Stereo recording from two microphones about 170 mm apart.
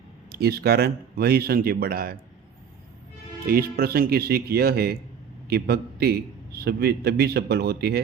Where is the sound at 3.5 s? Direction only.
60° right (ahead or behind).